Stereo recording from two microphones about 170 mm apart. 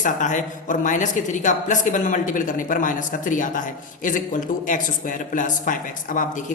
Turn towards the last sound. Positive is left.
turn(degrees=50)  # may be behind; listen again after turning